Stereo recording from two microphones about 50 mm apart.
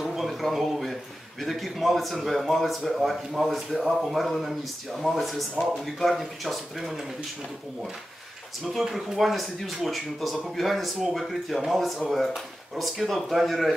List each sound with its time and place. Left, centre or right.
0.0 s a sound: centre
0.3 s a man's voice: centre
8.7 s a man's voice: centre